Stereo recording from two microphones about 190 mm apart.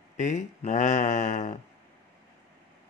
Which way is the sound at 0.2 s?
40° left (ahead or behind).